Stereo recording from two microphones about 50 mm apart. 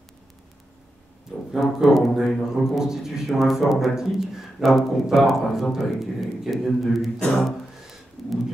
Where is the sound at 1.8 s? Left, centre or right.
Centre.